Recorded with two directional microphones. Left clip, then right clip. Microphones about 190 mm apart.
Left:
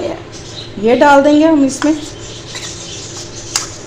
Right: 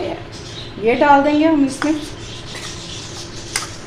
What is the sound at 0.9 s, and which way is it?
Speech, 40° left (ahead or behind).